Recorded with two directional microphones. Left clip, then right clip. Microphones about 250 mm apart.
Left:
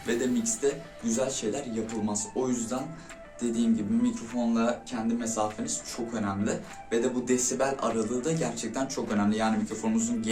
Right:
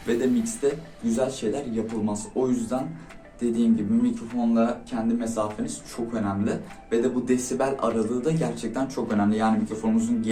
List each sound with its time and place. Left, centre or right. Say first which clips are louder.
0.0 s speech: right 4 dB; centre